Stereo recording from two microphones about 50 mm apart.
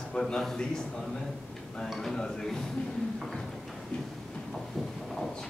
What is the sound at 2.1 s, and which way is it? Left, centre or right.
Speech, centre.